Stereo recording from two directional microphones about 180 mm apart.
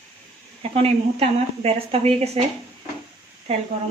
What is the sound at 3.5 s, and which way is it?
Speech, 35° right (ahead or behind).